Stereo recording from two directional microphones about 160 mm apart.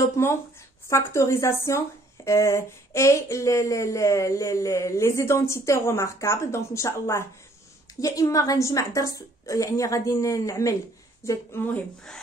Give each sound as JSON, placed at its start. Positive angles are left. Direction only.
{"t": 0.2, "sound": "a woman's voice", "side_deg": 15}